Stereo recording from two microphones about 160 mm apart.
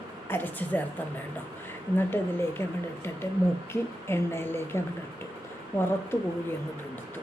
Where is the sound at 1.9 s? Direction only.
15° left (ahead or behind).